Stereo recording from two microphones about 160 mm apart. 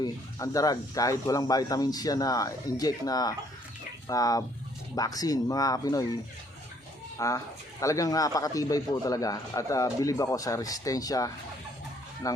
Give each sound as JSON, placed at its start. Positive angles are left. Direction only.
{"t": 0.0, "sound": "speech", "side_deg": 20}
{"t": 7.2, "sound": "speech", "side_deg": 20}